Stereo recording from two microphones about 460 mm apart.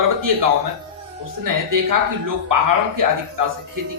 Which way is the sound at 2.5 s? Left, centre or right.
Right.